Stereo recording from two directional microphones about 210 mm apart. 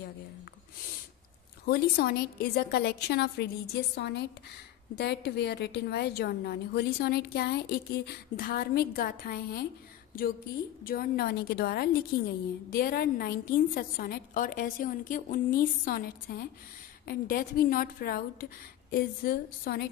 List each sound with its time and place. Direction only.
1.7 s a woman's voice: 45° left (ahead or behind)
10.8 s a woman's voice: 45° left (ahead or behind)